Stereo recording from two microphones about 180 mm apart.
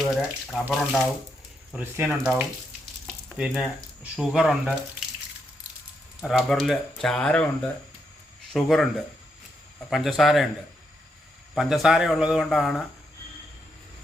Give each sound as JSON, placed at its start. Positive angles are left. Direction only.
{"t": 0.1, "sound": "speech", "side_deg": -5}
{"t": 6.2, "sound": "speech", "side_deg": 0}
{"t": 8.5, "sound": "speech", "side_deg": 0}
{"t": 9.9, "sound": "speech", "side_deg": 0}
{"t": 11.5, "sound": "speech", "side_deg": 0}